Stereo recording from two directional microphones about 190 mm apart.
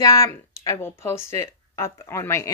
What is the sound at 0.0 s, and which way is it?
Speech, 15° left (ahead or behind).